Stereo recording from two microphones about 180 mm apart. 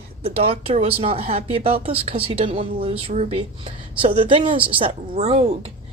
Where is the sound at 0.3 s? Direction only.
35° right (ahead or behind).